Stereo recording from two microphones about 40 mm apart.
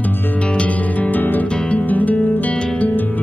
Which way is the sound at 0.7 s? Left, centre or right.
Left.